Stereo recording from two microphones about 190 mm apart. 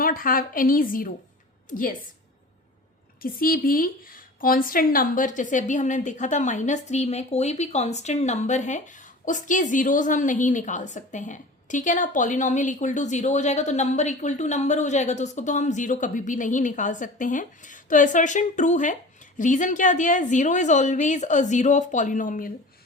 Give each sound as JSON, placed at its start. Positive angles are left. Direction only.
{"t": 0.0, "sound": "a woman's voice", "side_deg": 50}
{"t": 3.2, "sound": "a woman's voice", "side_deg": 50}